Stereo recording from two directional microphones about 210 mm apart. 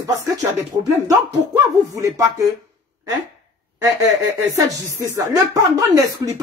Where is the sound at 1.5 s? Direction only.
15° right (ahead or behind).